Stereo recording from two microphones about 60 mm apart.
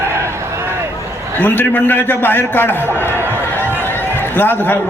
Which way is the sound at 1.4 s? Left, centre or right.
Left.